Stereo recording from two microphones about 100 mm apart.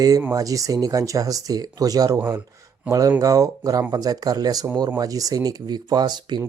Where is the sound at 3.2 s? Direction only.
35° right (ahead or behind).